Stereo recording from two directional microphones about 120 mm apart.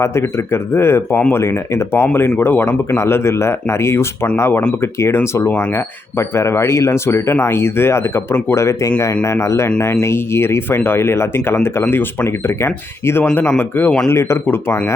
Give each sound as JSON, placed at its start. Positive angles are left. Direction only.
{"t": 0.0, "sound": "speech", "side_deg": 20}